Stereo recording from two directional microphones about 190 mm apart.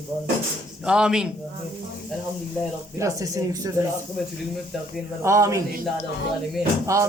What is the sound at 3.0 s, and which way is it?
Speech, 15° right (ahead or behind).